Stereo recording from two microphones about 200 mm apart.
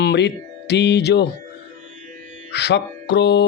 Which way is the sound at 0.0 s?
55° left (ahead or behind).